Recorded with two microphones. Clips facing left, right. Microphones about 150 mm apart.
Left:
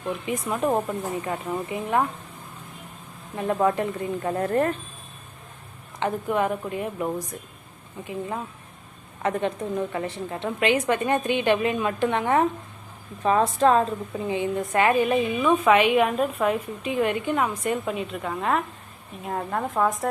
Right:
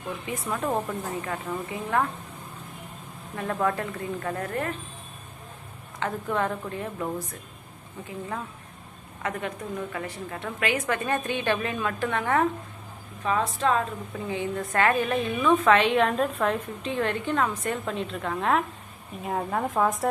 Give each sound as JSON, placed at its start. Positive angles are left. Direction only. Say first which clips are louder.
{"t": 0.3, "sound": "a woman's voice", "louder": "left 4 dB", "side_deg": 20}
{"t": 3.3, "sound": "a woman's voice", "louder": "left 4 dB", "side_deg": 20}
{"t": 6.0, "sound": "a woman's voice", "louder": "left 3 dB", "side_deg": 15}
{"t": 9.2, "sound": "a woman's voice", "louder": "left 6 dB", "side_deg": 30}
{"t": 13.2, "sound": "a woman's voice", "louder": "left 6 dB", "side_deg": 40}
{"t": 14.3, "sound": "a woman's voice", "louder": "left 4 dB", "side_deg": 20}